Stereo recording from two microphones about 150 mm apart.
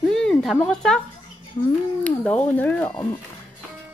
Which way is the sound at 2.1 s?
10° left (ahead or behind).